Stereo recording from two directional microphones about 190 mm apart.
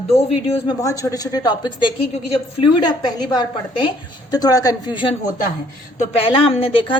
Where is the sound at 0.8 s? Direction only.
15° left (ahead or behind).